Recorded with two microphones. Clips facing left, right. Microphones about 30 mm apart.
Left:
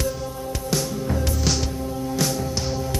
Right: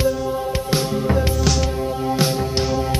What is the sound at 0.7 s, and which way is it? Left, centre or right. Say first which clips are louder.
Music: right 3 dB; right.